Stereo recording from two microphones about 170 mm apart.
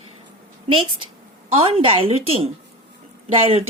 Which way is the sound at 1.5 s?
35° right (ahead or behind).